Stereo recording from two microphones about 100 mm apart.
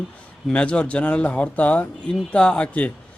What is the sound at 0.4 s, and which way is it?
Speech, 10° left (ahead or behind).